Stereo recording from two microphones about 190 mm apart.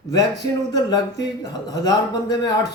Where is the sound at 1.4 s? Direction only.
20° left (ahead or behind).